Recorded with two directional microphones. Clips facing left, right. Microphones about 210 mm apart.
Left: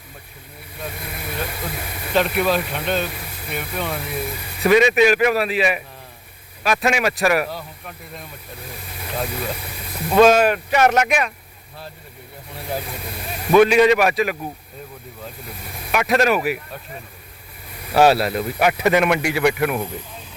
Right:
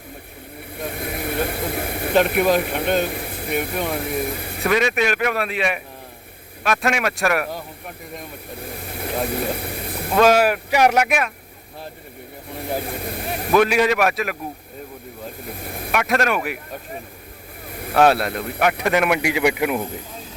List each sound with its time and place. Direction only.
0.8 s vehicle: 55° right (ahead or behind)
2.6 s speech: 55° right (ahead or behind)
4.6 s a man's voice: centre (ahead or behind)
7.5 s speech: 15° right (ahead or behind)
8.8 s speech: 55° right (ahead or behind)
10.1 s speech: centre (ahead or behind)
12.8 s speech: 50° right (ahead or behind)
13.5 s a man's voice: centre (ahead or behind)
15.6 s speech: 55° right (ahead or behind)
15.9 s a man's voice: centre (ahead or behind)
17.9 s a man's voice: 5° left (ahead or behind); by 19.9 s 15° right (ahead or behind)